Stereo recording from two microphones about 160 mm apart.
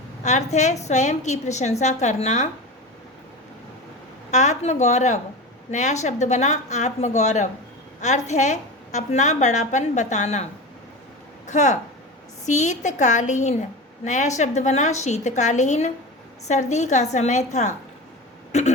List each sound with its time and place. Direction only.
0.2 s a woman's voice: 45° left (ahead or behind)
4.3 s a woman's voice: 45° left (ahead or behind)
11.4 s a woman's voice: 50° left (ahead or behind)